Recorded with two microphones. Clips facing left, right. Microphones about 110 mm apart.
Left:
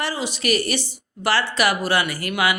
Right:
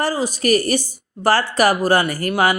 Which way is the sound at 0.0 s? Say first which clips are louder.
Right 5 dB; 40° right (ahead or behind).